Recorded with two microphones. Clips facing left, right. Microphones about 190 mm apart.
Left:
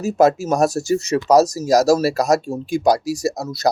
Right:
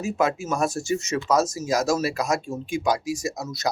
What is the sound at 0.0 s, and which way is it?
Speech, 40° left (ahead or behind).